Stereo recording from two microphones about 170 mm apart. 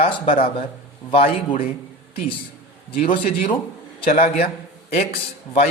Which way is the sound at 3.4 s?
30° left (ahead or behind).